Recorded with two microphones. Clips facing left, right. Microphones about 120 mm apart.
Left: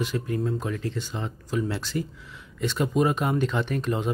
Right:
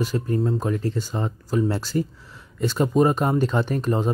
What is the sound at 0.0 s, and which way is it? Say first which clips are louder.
Speech: right 4 dB; 40° right (ahead or behind).